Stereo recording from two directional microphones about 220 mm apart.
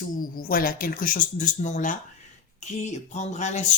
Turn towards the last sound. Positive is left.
turn(degrees=30)  # may be behind; listen again after turning